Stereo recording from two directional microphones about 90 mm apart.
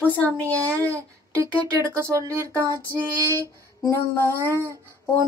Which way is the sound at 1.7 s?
35° right (ahead or behind).